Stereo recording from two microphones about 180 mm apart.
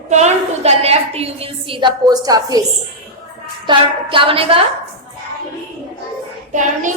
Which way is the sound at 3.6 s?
30° right (ahead or behind).